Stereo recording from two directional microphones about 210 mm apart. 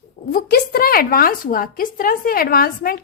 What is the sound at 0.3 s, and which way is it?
A woman's voice, 45° left (ahead or behind).